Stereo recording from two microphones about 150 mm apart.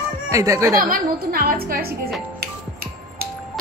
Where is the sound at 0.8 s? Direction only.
75° right (ahead or behind).